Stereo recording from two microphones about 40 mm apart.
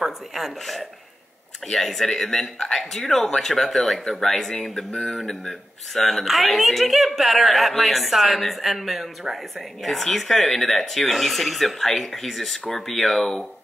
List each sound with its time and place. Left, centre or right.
0.0 s a woman's voice: centre
4.9 s speech: centre
5.5 s a woman's voice: centre